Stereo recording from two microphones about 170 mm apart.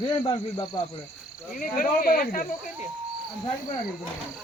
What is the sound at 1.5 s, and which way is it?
Speech, 55° left (ahead or behind).